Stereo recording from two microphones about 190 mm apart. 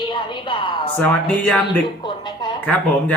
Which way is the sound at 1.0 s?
5° left (ahead or behind).